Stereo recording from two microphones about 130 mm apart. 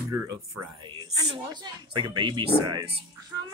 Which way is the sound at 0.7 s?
35° right (ahead or behind).